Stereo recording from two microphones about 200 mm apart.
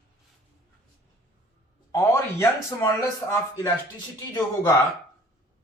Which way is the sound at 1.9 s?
15° left (ahead or behind).